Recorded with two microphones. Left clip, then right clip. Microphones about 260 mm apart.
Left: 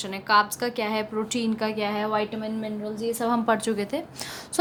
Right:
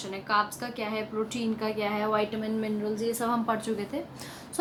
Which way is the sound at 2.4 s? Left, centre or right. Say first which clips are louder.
Even; centre.